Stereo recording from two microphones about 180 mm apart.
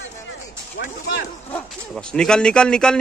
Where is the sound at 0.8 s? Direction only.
70° left (ahead or behind).